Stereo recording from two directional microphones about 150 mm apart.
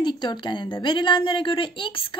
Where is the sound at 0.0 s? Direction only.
30° left (ahead or behind).